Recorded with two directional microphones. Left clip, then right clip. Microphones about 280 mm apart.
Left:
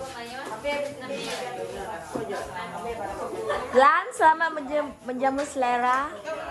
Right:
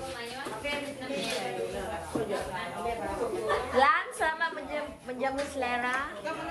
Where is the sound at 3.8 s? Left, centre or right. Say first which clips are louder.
Left 7 dB; centre.